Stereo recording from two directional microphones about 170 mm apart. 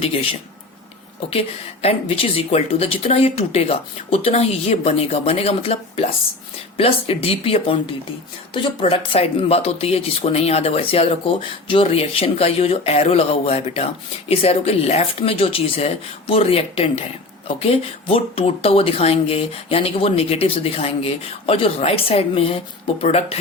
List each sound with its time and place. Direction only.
0.0 s speech: 35° left (ahead or behind)